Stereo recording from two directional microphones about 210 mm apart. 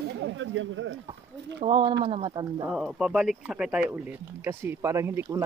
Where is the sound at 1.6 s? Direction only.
20° right (ahead or behind).